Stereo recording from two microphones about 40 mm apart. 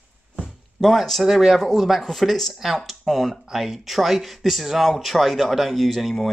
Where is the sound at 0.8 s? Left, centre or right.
Centre.